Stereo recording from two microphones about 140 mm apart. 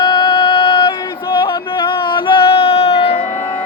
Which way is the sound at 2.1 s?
35° left (ahead or behind).